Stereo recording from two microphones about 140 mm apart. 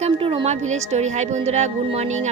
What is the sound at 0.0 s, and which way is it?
Speech, 40° right (ahead or behind).